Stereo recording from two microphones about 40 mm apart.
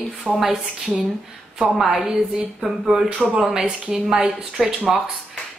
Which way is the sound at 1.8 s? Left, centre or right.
Centre.